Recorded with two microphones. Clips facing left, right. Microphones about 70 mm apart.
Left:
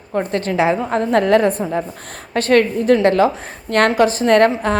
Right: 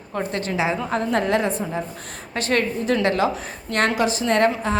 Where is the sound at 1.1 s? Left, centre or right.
Left.